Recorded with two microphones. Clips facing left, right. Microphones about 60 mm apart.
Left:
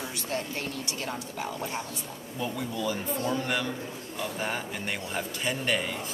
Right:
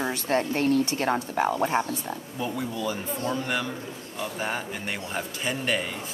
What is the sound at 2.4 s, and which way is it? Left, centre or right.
Speech, centre.